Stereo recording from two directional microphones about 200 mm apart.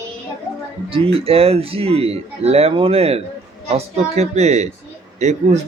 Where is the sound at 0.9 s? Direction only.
30° right (ahead or behind).